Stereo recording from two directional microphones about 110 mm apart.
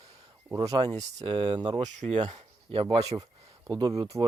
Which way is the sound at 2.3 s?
65° right (ahead or behind).